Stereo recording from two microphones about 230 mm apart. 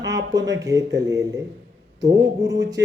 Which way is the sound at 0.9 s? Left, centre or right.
Centre.